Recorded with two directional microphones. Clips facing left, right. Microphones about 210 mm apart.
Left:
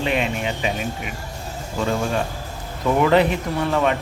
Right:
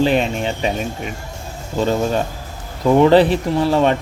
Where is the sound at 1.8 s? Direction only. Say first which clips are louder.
Right 5 dB; 30° right (ahead or behind).